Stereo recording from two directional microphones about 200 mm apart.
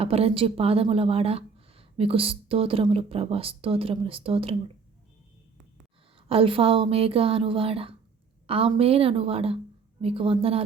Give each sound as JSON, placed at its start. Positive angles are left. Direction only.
{"t": 0.0, "sound": "speech", "side_deg": -30}
{"t": 6.1, "sound": "speech", "side_deg": -25}